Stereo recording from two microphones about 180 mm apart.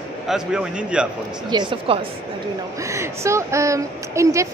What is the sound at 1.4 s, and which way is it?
Speech, 25° right (ahead or behind).